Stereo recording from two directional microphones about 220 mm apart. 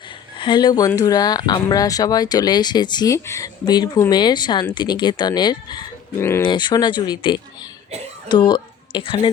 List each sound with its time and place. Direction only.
0.3 s speech: 20° left (ahead or behind)